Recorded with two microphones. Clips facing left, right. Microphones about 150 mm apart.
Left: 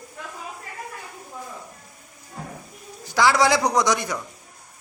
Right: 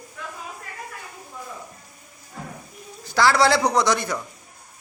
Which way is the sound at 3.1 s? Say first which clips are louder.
Even; 15° left (ahead or behind).